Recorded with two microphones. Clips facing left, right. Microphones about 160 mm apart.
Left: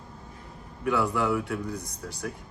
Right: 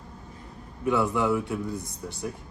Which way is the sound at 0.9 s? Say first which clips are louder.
Right 2 dB; centre (ahead or behind).